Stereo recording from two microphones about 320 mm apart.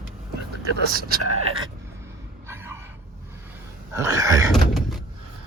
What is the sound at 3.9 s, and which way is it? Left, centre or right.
Speech, centre.